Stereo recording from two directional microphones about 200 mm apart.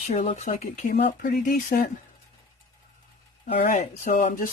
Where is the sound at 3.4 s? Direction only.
40° left (ahead or behind).